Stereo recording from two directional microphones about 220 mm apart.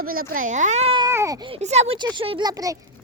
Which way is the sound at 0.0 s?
40° right (ahead or behind).